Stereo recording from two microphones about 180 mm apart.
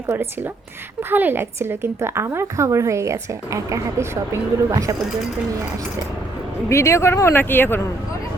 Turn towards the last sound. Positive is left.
turn(degrees=10)  # may be behind; listen again after turning